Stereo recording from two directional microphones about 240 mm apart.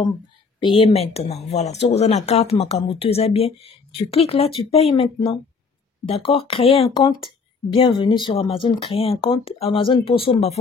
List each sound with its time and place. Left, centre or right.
0.6 s speech: centre